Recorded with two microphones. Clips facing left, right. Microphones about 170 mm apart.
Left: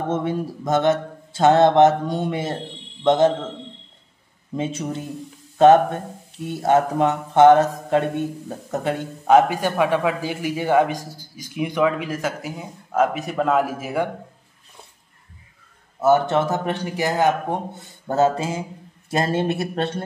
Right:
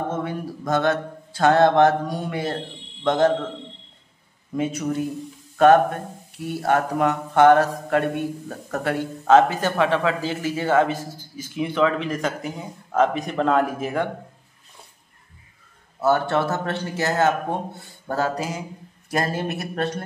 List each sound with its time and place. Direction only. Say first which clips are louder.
0.1 s mantra: left 4 dB; 25° left (ahead or behind)
3.0 s a man's voice: left 3 dB; 20° left (ahead or behind)
4.6 s mantra: right 2 dB; 25° left (ahead or behind)
8.5 s a man's voice: left 1 dB; 20° left (ahead or behind)
16.0 s a man's voice: left 3 dB; 20° left (ahead or behind)
18.0 s mantra: left 5 dB; 25° left (ahead or behind)